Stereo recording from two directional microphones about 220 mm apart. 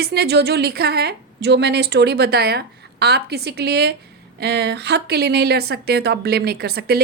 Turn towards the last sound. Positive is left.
turn(degrees=-45)  # may be behind; listen again after turning